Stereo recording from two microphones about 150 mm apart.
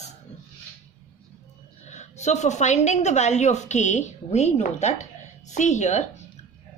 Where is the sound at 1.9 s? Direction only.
50° left (ahead or behind).